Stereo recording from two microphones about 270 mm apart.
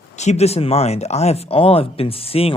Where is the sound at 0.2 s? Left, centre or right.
Left.